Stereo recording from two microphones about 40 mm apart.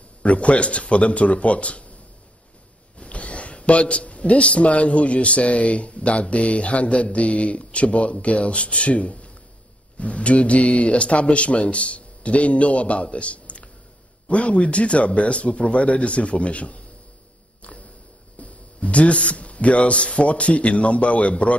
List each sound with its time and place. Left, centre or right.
0.2 s speech: left
3.0 s speech: left
17.6 s a sound: left
18.4 s speech: left